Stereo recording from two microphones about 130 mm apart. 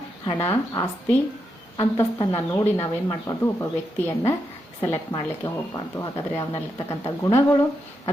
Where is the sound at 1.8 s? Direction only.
30° left (ahead or behind).